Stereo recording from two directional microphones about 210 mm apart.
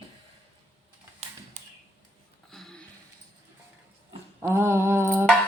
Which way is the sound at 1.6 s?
35° right (ahead or behind).